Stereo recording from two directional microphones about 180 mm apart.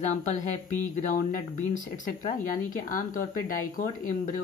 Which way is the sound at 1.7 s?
45° left (ahead or behind).